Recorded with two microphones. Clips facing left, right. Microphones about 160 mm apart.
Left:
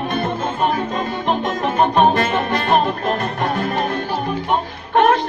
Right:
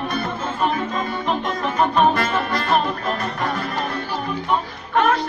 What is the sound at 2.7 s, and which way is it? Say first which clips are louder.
Music: left 4 dB; 50° left (ahead or behind).